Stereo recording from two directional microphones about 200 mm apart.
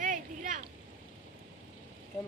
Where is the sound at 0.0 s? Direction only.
40° right (ahead or behind).